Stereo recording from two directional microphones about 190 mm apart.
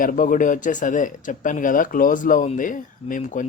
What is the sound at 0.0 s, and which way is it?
Speech, 45° left (ahead or behind).